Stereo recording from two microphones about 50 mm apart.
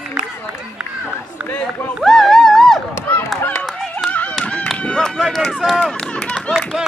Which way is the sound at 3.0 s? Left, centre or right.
Left.